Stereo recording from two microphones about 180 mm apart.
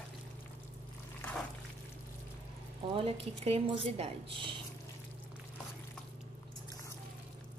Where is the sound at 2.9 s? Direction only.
35° right (ahead or behind).